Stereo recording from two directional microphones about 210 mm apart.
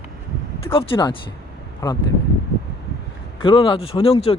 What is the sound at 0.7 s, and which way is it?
Speech, 25° left (ahead or behind).